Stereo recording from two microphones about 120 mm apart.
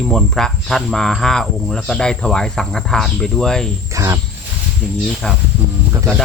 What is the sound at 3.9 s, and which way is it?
Speech, 25° right (ahead or behind).